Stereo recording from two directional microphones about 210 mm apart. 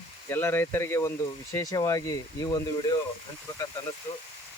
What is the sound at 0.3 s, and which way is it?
Speech, 10° left (ahead or behind).